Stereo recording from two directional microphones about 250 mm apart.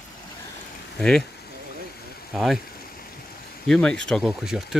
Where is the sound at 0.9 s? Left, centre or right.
Centre.